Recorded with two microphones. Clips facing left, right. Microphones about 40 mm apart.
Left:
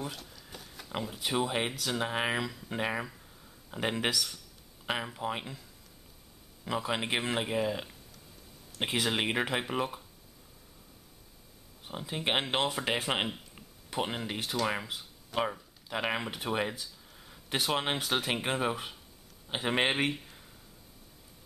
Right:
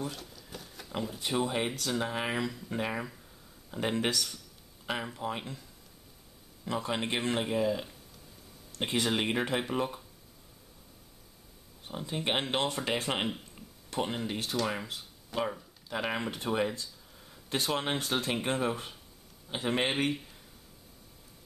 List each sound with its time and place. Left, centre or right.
0.0 s speech: centre
2.3 s speech: centre
2.7 s speech: centre
4.1 s speech: centre
4.8 s speech: centre
6.6 s speech: centre
11.9 s speech: centre
16.8 s a sound: centre
18.1 s speech: centre